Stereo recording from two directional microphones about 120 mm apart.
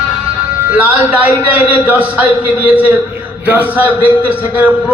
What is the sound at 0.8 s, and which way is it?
A man's voice, 15° right (ahead or behind).